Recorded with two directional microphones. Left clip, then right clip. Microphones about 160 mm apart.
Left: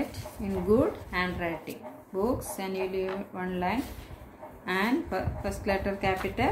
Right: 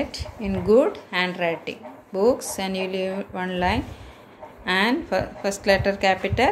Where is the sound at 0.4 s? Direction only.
50° right (ahead or behind).